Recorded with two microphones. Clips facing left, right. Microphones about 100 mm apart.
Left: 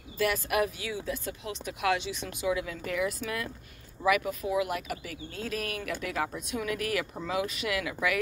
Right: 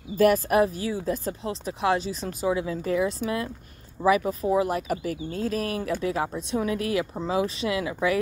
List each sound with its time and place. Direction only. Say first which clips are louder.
0.2 s speech: right 8 dB; 40° right (ahead or behind)